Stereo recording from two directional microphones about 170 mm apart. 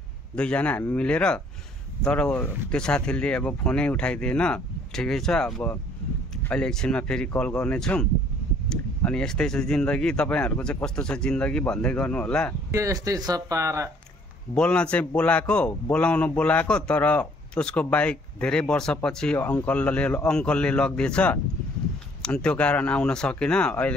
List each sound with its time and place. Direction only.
0.4 s a man's voice: 5° left (ahead or behind)
12.7 s speech: 20° right (ahead or behind)
14.5 s a man's voice: 5° left (ahead or behind)